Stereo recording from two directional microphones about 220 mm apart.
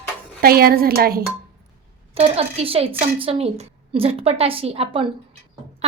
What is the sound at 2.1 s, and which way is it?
A child's voice, 30° right (ahead or behind).